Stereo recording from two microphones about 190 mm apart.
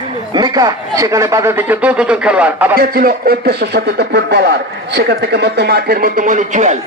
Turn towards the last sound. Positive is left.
turn(degrees=-40)  # may be behind; listen again after turning